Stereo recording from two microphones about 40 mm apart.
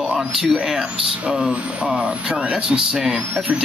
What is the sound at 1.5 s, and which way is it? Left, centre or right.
Speech, right.